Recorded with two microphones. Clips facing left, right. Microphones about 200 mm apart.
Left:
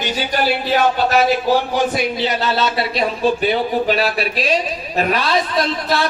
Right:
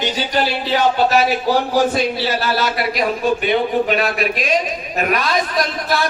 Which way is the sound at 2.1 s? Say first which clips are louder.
Left 1 dB; 20° left (ahead or behind).